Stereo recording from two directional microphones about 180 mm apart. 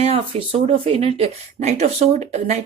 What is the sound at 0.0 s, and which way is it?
Speech, 35° right (ahead or behind).